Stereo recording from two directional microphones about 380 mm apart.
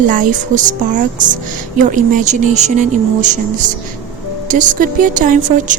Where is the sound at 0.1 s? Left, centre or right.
Centre.